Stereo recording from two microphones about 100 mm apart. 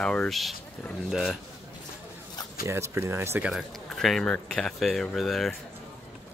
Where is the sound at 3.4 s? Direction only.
Centre (ahead or behind).